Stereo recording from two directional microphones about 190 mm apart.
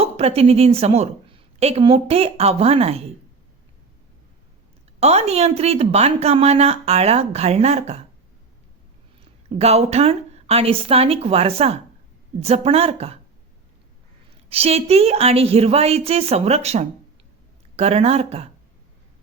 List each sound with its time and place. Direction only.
0.0 s a woman's voice: 30° right (ahead or behind)
4.9 s a woman's voice: 35° right (ahead or behind)
9.5 s a woman's voice: 35° right (ahead or behind)
14.5 s a woman's voice: 30° right (ahead or behind)